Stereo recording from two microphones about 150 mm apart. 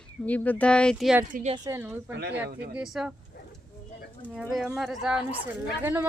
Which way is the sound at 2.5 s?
90° right.